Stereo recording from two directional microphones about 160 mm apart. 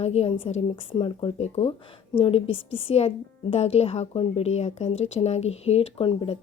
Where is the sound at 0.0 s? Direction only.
40° left (ahead or behind).